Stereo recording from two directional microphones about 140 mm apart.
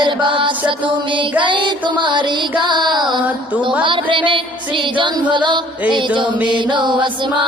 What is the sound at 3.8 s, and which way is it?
Music, 35° right (ahead or behind).